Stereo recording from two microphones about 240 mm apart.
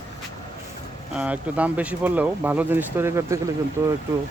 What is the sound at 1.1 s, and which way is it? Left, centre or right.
Speech, centre.